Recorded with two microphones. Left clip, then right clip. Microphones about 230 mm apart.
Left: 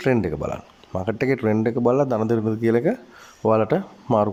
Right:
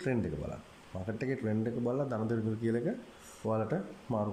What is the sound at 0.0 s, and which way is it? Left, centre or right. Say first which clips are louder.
Speech: left 13 dB; left.